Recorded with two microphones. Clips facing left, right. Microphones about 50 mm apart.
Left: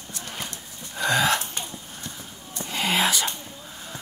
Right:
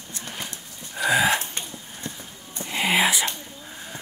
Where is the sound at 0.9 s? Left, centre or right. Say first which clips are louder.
Right 1 dB; centre.